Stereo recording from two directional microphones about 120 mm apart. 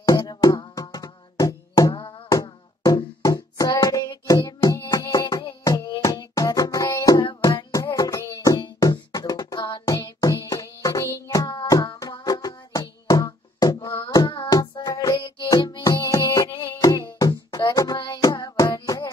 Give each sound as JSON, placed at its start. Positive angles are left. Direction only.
{"t": 0.0, "sound": "music", "side_deg": 30}
{"t": 2.4, "sound": "a sound", "side_deg": 35}
{"t": 4.7, "sound": "music", "side_deg": 30}
{"t": 7.2, "sound": "music", "side_deg": 45}
{"t": 7.7, "sound": "music", "side_deg": 30}
{"t": 8.9, "sound": "a sound", "side_deg": 35}
{"t": 9.9, "sound": "music", "side_deg": 30}